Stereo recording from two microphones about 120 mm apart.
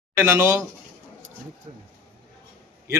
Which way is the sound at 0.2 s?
25° right (ahead or behind).